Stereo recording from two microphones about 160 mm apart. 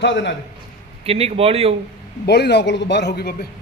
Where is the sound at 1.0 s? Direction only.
40° right (ahead or behind).